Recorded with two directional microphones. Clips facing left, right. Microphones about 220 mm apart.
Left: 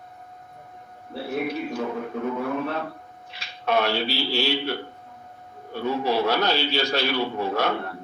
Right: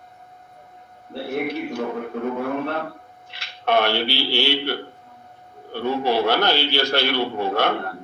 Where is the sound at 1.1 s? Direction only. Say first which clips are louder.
Right 2 dB; 65° right (ahead or behind).